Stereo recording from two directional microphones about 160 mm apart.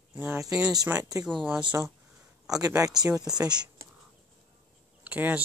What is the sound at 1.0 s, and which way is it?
Speech, 20° right (ahead or behind).